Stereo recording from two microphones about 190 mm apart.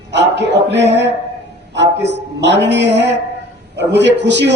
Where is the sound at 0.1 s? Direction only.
65° right (ahead or behind).